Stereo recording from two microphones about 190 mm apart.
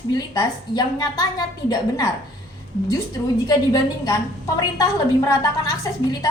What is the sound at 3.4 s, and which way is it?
Speech, 20° left (ahead or behind).